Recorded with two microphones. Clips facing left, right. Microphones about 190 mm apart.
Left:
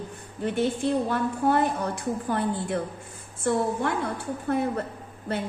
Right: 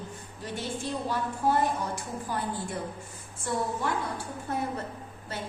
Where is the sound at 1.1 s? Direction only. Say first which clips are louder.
Left 4 dB; 60° left (ahead or behind).